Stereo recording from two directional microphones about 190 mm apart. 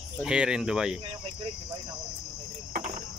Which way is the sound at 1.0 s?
30° right (ahead or behind).